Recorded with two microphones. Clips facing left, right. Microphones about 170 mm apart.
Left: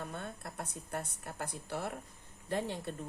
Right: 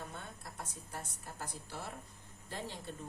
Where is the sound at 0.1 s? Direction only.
60° left (ahead or behind).